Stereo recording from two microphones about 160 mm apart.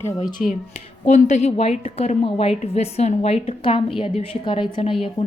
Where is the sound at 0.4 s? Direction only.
50° left (ahead or behind).